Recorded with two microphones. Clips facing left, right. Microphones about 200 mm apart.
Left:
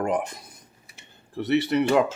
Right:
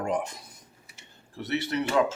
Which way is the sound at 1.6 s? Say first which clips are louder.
Left 7 dB; 60° left (ahead or behind).